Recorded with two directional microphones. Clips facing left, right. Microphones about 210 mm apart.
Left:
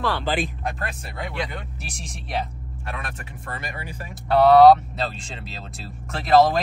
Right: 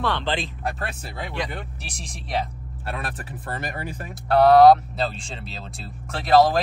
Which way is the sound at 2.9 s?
35° right (ahead or behind).